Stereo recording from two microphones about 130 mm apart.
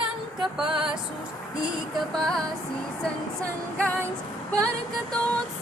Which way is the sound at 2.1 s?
5° left (ahead or behind).